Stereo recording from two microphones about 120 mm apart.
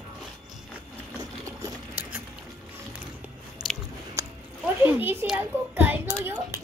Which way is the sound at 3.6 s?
5° right (ahead or behind).